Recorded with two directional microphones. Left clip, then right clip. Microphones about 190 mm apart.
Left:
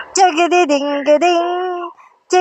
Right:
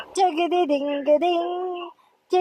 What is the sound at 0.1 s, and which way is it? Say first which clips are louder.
Female singing: left 9 dB; 15° left (ahead or behind).